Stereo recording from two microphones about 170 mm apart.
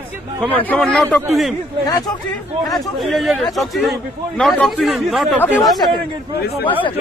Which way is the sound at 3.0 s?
Centre (ahead or behind).